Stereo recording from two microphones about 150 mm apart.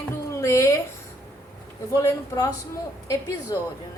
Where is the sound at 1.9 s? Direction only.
20° left (ahead or behind).